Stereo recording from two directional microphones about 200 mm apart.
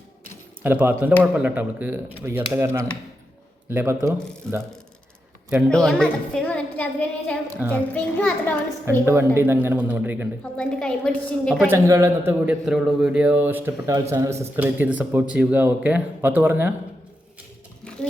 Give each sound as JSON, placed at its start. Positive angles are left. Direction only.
{"t": 0.6, "sound": "a man's voice", "side_deg": -10}
{"t": 5.6, "sound": "a woman's voice", "side_deg": 5}
{"t": 9.0, "sound": "a man's voice", "side_deg": -10}
{"t": 10.6, "sound": "a woman's voice", "side_deg": 5}
{"t": 11.7, "sound": "a man's voice", "side_deg": -15}
{"t": 17.8, "sound": "a sound", "side_deg": 5}